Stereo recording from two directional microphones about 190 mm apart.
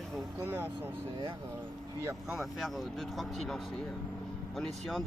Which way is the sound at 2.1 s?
Centre (ahead or behind).